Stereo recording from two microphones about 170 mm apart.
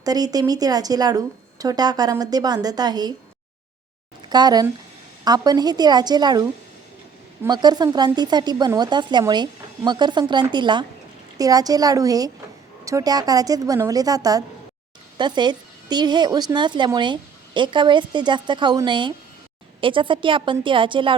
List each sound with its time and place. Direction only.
0.0 s a woman's voice: 20° right (ahead or behind)
4.3 s a woman's voice: 25° right (ahead or behind)